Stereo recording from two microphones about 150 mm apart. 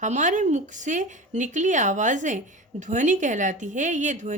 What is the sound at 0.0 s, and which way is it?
A woman's voice, 55° right (ahead or behind).